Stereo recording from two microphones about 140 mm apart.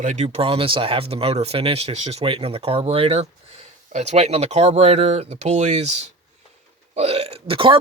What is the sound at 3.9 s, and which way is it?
Speech, 55° right (ahead or behind).